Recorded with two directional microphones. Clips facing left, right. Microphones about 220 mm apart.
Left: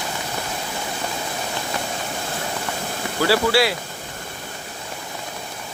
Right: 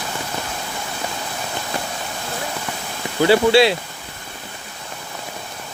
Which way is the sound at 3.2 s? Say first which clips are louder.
Right 5 dB; 20° right (ahead or behind).